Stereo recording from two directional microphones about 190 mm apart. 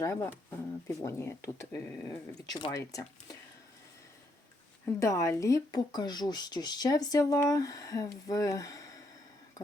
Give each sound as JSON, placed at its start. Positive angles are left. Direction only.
{"t": 0.0, "sound": "speech", "side_deg": 15}
{"t": 4.9, "sound": "speech", "side_deg": 15}